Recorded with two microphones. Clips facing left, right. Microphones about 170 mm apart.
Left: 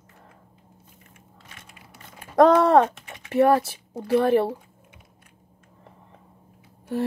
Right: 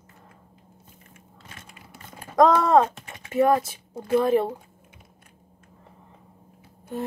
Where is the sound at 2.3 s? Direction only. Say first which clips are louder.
Left 2 dB; 65° left (ahead or behind).